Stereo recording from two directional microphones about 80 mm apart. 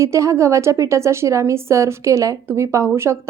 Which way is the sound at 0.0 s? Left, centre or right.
Right.